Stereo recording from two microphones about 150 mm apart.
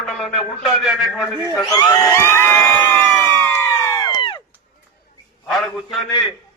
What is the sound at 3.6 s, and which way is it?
Crowd, 20° left (ahead or behind).